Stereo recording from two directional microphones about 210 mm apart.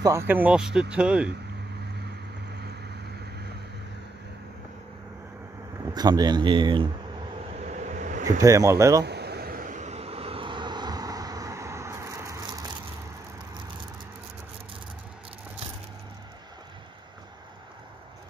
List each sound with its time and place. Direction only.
0.0 s speech: 10° right (ahead or behind)
5.9 s speech: 20° right (ahead or behind)
7.6 s vehicle: 35° right (ahead or behind)
8.4 s speech: 15° right (ahead or behind)
9.0 s vehicle: 50° right (ahead or behind); by 12.7 s 15° right (ahead or behind)